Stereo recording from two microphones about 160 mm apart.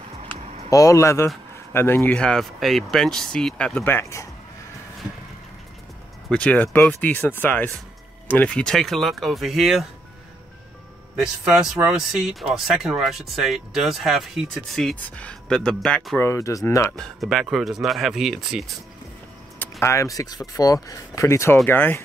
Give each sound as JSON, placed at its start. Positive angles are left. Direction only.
{"t": 0.7, "sound": "speech", "side_deg": 20}
{"t": 6.2, "sound": "speech", "side_deg": 5}
{"t": 11.1, "sound": "speech", "side_deg": -5}
{"t": 16.9, "sound": "speech", "side_deg": 5}
{"t": 19.8, "sound": "speech", "side_deg": 20}